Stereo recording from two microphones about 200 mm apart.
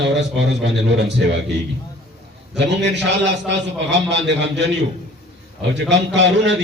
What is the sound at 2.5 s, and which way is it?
A man's voice, 60° right (ahead or behind).